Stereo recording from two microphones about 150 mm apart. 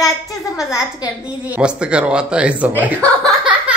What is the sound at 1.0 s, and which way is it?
Speech, 10° right (ahead or behind).